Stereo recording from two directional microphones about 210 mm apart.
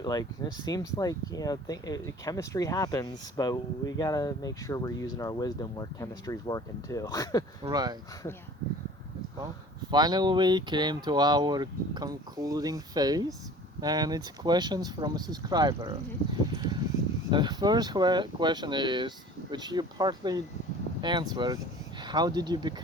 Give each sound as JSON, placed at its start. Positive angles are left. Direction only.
{"t": 0.0, "sound": "speech", "side_deg": 20}
{"t": 7.6, "sound": "speech", "side_deg": -20}
{"t": 9.9, "sound": "speech", "side_deg": -20}
{"t": 17.3, "sound": "speech", "side_deg": -20}